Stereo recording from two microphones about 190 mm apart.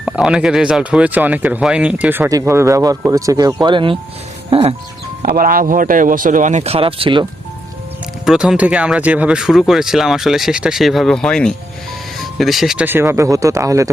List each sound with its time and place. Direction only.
0.0 s speech: 5° right (ahead or behind); by 4.7 s 30° right (ahead or behind)
5.2 s speech: 50° right (ahead or behind); by 7.3 s 25° right (ahead or behind)
8.2 s speech: 5° right (ahead or behind)